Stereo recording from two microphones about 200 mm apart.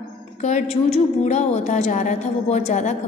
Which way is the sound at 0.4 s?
35° left (ahead or behind).